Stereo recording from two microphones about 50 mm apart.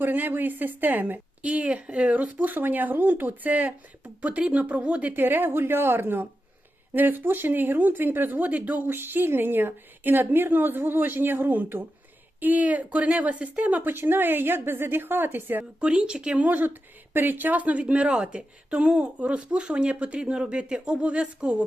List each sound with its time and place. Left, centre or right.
0.0 s speech: right
1.5 s a woman's voice: right
5.1 s a woman's voice: right
8.9 s a woman's voice: right
13.8 s a woman's voice: right
15.8 s a woman's voice: centre
16.5 s a woman's voice: right